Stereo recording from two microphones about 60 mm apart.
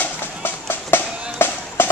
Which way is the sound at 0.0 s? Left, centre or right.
Left.